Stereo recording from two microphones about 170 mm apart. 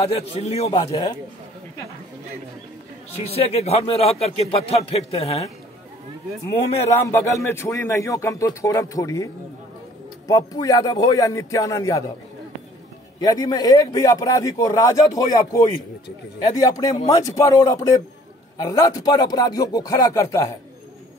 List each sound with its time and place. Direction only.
0.0 s speech: 35° left (ahead or behind)
0.9 s speech: 20° left (ahead or behind)
3.3 s speech: 35° left (ahead or behind)
7.1 s speech: 15° left (ahead or behind)
13.2 s speech: 20° left (ahead or behind)